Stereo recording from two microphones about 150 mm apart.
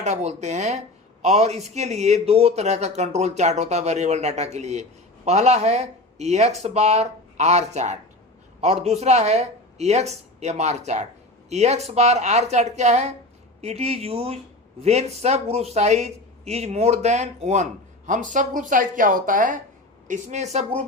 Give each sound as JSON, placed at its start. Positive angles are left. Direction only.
{"t": 0.0, "sound": "speech", "side_deg": -50}
{"t": 20.1, "sound": "speech", "side_deg": -50}